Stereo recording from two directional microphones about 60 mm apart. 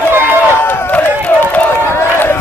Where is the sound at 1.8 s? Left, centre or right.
Left.